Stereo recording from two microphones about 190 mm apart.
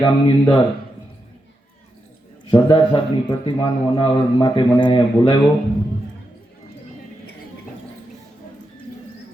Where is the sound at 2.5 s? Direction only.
25° left (ahead or behind).